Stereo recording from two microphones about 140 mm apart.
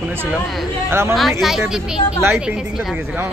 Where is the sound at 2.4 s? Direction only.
5° right (ahead or behind).